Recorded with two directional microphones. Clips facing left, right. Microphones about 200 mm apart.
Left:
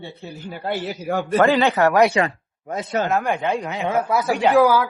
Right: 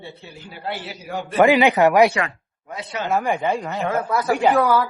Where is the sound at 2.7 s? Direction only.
45° left (ahead or behind).